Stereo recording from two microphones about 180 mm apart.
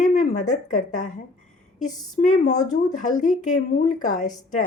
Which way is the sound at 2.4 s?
45° left (ahead or behind).